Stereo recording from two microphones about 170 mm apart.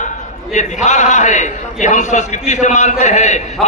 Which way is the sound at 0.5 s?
45° left (ahead or behind).